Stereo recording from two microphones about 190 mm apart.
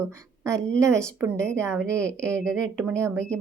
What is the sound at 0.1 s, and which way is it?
A woman's voice, 15° right (ahead or behind).